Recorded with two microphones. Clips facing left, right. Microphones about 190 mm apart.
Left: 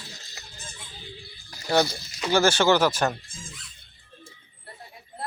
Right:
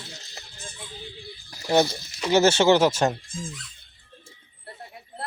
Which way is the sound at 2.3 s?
25° right (ahead or behind).